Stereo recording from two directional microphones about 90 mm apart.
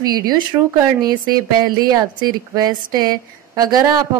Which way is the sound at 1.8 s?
45° right (ahead or behind).